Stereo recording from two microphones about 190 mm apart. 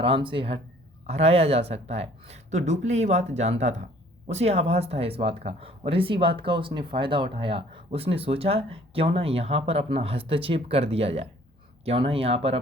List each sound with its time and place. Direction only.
0.0 s speech: 25° right (ahead or behind)